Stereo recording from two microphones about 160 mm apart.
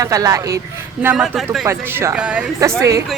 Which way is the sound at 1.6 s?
15° right (ahead or behind).